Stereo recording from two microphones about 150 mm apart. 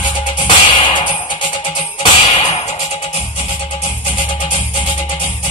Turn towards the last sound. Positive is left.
turn(degrees=30)  # may be behind; listen again after turning